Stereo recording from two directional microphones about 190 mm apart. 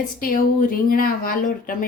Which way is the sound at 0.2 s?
50° left (ahead or behind).